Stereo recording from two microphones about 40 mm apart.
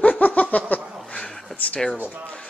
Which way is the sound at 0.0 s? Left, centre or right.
Left.